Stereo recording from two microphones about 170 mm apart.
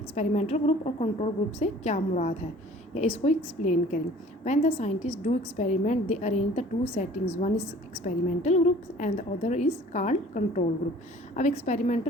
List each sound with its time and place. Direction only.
0.2 s a woman's voice: 40° left (ahead or behind)